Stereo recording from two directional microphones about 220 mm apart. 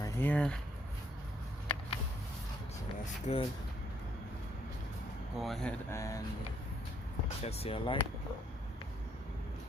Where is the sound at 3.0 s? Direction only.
25° left (ahead or behind).